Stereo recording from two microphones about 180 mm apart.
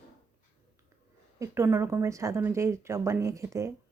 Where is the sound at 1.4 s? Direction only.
15° right (ahead or behind).